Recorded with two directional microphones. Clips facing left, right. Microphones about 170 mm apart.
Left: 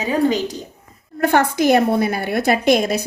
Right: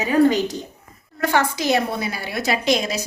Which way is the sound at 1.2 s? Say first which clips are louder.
Left 5 dB; 55° left (ahead or behind).